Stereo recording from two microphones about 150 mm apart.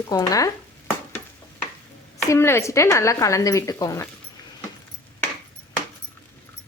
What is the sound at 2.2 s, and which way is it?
Speech, 20° left (ahead or behind).